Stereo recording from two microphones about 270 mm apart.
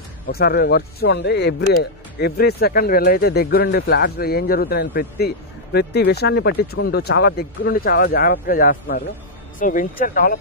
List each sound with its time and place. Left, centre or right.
0.3 s speech: left